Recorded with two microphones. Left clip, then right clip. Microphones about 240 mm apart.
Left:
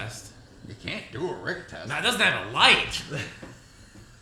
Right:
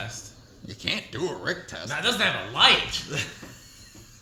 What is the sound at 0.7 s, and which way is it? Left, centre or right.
Speech, right.